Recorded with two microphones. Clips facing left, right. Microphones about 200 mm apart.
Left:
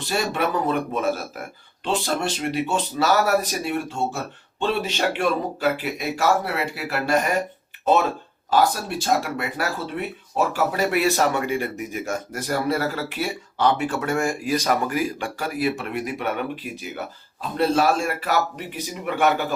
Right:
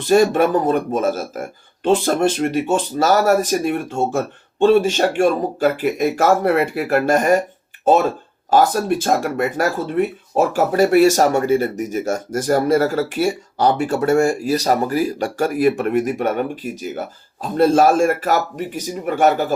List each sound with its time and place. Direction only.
0.1 s speech: 45° right (ahead or behind)
8.4 s speech: 50° right (ahead or behind)